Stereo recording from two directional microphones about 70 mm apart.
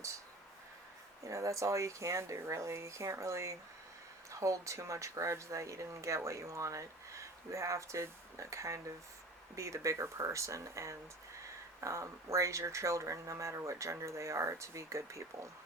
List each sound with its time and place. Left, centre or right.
1.2 s speech: right